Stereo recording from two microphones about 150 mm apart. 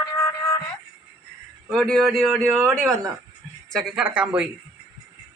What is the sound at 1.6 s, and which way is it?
A man's voice, 5° left (ahead or behind).